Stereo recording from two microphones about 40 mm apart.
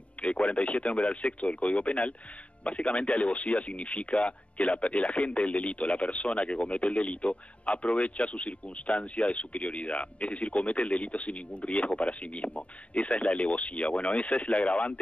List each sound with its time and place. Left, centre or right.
0.2 s speech: left